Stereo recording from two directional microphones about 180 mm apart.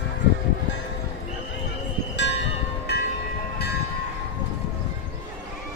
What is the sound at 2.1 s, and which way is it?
Music, 75° left (ahead or behind).